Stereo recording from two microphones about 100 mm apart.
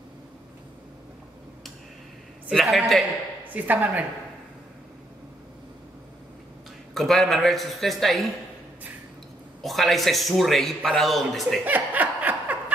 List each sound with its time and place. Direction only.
2.5 s speech: centre (ahead or behind)
3.4 s speech: 15° right (ahead or behind)
6.9 s speech: centre (ahead or behind)
9.6 s speech: centre (ahead or behind)
11.6 s laughter: 15° right (ahead or behind)